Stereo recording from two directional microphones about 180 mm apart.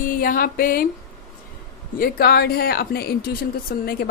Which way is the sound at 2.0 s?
60° left (ahead or behind).